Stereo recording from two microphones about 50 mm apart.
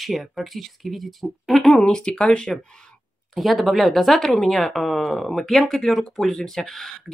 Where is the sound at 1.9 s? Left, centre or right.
Centre.